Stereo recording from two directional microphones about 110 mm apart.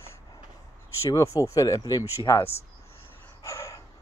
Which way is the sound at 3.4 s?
25° left (ahead or behind).